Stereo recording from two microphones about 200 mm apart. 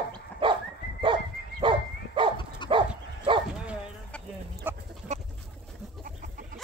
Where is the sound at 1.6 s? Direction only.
25° right (ahead or behind).